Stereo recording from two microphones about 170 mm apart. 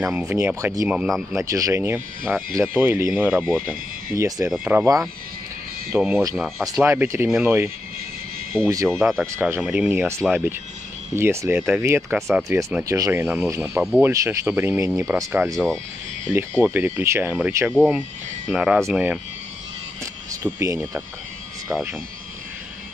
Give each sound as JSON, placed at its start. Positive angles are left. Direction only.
{"t": 0.0, "sound": "speech", "side_deg": -5}
{"t": 1.3, "sound": "speech", "side_deg": -20}
{"t": 5.9, "sound": "speech", "side_deg": -10}
{"t": 14.1, "sound": "speech", "side_deg": -15}
{"t": 15.5, "sound": "speech", "side_deg": 5}
{"t": 16.6, "sound": "speech", "side_deg": -10}
{"t": 20.4, "sound": "speech", "side_deg": -15}